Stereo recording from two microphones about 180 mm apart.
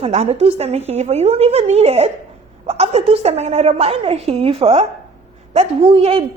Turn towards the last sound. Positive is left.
turn(degrees=-30)  # may be behind; listen again after turning